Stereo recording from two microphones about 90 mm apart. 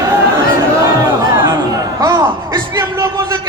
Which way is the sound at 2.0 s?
40° right (ahead or behind).